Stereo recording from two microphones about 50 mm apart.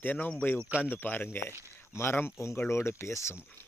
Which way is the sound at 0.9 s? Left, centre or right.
Left.